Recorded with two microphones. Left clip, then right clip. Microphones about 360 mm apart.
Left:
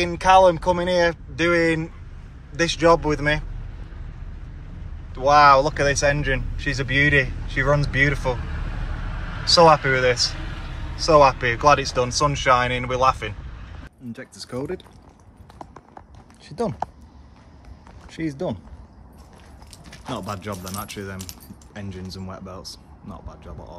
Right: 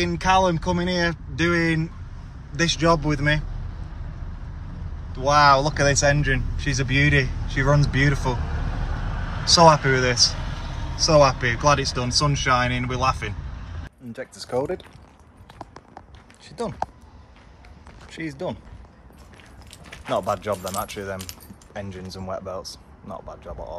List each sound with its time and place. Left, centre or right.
0.0 s speech: centre
5.1 s speech: centre
8.8 s vehicle: right
9.8 s speech: centre
10.3 s vehicle: right
11.1 s speech: centre
16.4 s speech: left
18.1 s speech: centre
20.1 s speech: centre